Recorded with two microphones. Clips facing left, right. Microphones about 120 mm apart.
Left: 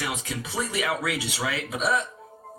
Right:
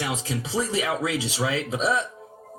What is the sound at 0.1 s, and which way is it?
Speech, 30° right (ahead or behind).